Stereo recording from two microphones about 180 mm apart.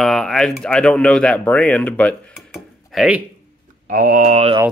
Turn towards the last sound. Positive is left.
turn(degrees=-40)  # may be behind; listen again after turning